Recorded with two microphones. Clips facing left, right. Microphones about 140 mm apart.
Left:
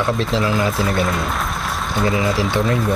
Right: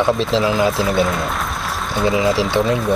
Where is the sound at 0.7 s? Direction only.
Centre (ahead or behind).